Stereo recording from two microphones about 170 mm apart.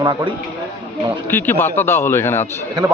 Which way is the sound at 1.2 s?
10° left (ahead or behind).